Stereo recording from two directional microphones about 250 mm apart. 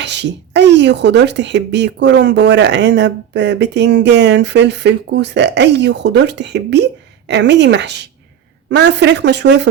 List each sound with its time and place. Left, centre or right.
0.0 s speech: right